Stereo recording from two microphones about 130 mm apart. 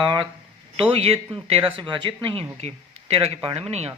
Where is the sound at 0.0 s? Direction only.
35° right (ahead or behind).